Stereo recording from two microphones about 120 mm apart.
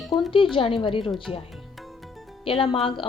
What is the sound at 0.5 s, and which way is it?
Speech, 45° left (ahead or behind).